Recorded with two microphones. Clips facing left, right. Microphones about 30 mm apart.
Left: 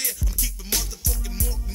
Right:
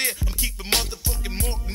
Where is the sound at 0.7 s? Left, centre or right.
Right.